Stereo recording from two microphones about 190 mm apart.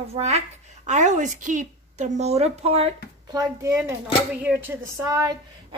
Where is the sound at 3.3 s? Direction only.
15° right (ahead or behind).